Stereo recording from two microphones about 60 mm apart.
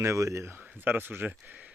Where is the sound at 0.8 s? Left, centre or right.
Right.